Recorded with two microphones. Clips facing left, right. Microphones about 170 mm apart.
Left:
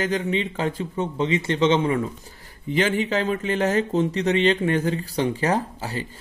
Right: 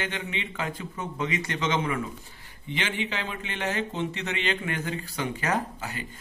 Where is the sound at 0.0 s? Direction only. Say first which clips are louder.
Left 10 dB; 35° left (ahead or behind).